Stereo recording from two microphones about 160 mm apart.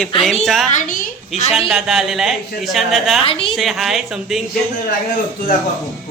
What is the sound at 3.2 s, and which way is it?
Speech, 35° left (ahead or behind).